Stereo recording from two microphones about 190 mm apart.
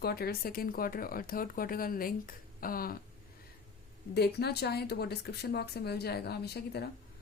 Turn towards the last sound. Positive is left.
turn(degrees=55)  # may be behind; listen again after turning